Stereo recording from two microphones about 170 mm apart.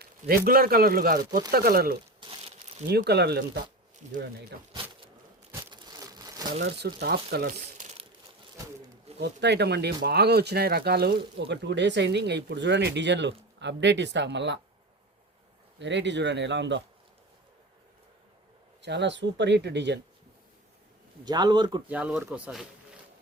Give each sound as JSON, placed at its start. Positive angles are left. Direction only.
{"t": 0.4, "sound": "speech", "side_deg": -60}
{"t": 2.2, "sound": "crumpling", "side_deg": -25}
{"t": 2.9, "sound": "speech", "side_deg": -75}
{"t": 4.0, "sound": "speech", "side_deg": -40}
{"t": 5.7, "sound": "crumpling", "side_deg": -25}
{"t": 6.5, "sound": "speech", "side_deg": -70}
{"t": 9.2, "sound": "speech", "side_deg": -80}
{"t": 15.8, "sound": "speech", "side_deg": -90}
{"t": 18.8, "sound": "speech", "side_deg": -90}
{"t": 21.2, "sound": "a man's voice", "side_deg": -25}
{"t": 21.8, "sound": "speech", "side_deg": -10}